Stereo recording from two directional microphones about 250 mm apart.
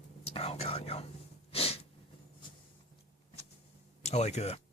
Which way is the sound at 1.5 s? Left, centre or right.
Left.